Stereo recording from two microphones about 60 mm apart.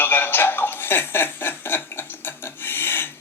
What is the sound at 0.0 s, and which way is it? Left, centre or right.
Speech, left.